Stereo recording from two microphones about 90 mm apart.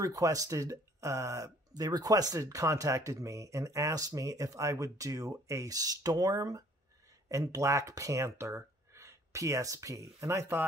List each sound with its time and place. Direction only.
0.0 s speech: 40° right (ahead or behind)